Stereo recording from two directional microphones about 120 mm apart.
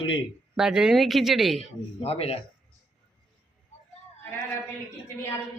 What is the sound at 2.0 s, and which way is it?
Speech, 55° left (ahead or behind).